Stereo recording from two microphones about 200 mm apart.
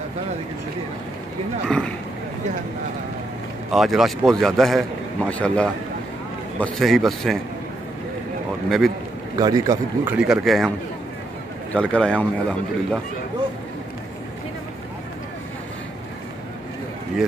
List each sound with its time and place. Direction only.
3.7 s a man's voice: centre (ahead or behind)
8.6 s a man's voice: centre (ahead or behind)
9.4 s a man's voice: 20° right (ahead or behind)
10.1 s a man's voice: 5° right (ahead or behind)
11.7 s a man's voice: 5° left (ahead or behind)